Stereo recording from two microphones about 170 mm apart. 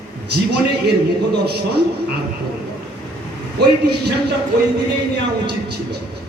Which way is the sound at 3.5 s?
75° right (ahead or behind).